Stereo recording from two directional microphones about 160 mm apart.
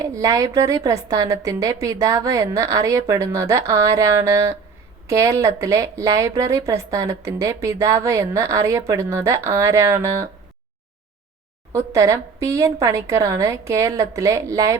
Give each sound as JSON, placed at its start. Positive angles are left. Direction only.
{"t": 0.0, "sound": "a woman's voice", "side_deg": -20}
{"t": 11.7, "sound": "a woman's voice", "side_deg": -20}